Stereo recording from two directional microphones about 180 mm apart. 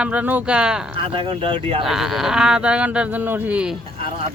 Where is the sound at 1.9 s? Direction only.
Centre (ahead or behind).